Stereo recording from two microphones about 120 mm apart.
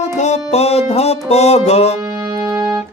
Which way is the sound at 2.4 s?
30° right (ahead or behind).